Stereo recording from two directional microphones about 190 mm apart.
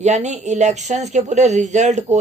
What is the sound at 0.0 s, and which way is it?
Speech, 40° right (ahead or behind).